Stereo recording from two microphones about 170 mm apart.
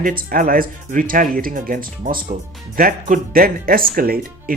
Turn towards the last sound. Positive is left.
turn(degrees=-60)  # may be behind; listen again after turning